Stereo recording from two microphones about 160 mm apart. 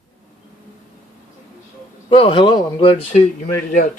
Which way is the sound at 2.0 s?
35° left (ahead or behind).